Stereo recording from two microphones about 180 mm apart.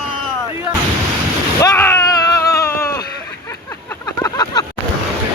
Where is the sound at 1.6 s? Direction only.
10° left (ahead or behind).